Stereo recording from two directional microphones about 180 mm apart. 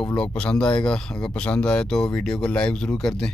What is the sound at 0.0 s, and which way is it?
Speech, 5° left (ahead or behind).